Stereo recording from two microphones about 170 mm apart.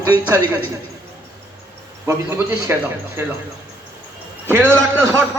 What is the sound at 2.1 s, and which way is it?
Speech, 15° right (ahead or behind).